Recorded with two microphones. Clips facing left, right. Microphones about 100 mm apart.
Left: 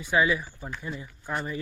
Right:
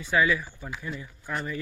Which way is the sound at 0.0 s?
20° left (ahead or behind).